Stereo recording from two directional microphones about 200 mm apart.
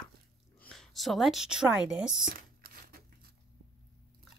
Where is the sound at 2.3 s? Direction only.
45° right (ahead or behind).